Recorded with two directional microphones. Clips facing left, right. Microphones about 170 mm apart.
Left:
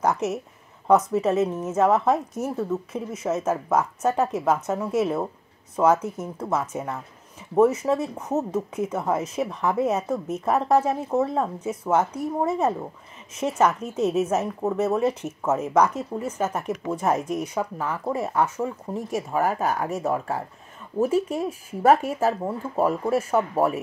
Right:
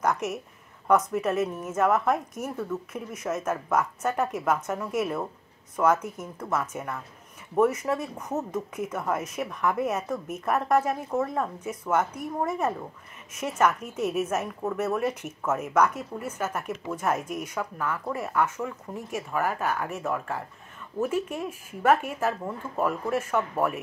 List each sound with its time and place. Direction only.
0.0 s a woman's voice: 25° left (ahead or behind)